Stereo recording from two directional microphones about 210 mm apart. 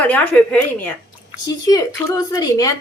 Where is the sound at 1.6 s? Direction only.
15° left (ahead or behind).